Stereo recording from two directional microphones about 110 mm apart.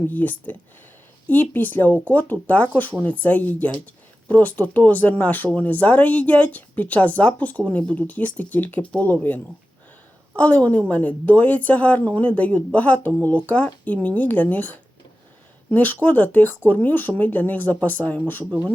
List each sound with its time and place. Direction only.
0.1 s a woman's voice: 15° left (ahead or behind)